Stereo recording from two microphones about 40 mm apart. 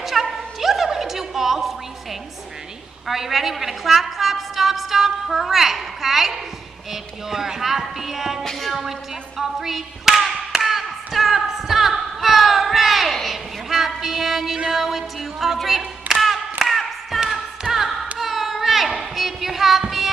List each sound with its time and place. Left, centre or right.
0.0 s music: centre
3.1 s a woman's voice: centre
6.9 s music: centre
8.5 s a woman's voice: centre
9.4 s clapping: centre
14.7 s a woman's voice: centre
16.1 s a sound: centre
17.6 s singing: right
18.2 s a sound: centre
18.9 s child singing: centre